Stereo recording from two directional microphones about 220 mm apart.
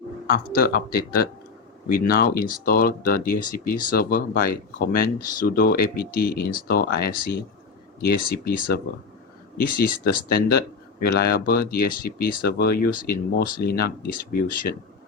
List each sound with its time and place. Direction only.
0.3 s speech: 40° left (ahead or behind)